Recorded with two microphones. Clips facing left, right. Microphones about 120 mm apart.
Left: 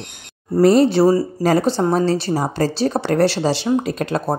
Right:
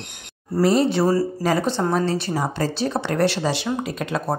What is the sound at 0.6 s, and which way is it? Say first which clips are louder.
Speech: left 5 dB; 40° left (ahead or behind).